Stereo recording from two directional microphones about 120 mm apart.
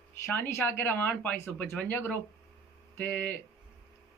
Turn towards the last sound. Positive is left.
turn(degrees=15)  # may be behind; listen again after turning